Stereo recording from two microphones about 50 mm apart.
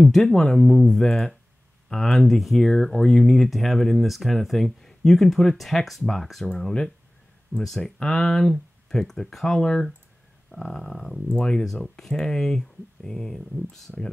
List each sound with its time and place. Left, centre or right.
0.0 s speech: centre
11.6 s speech: centre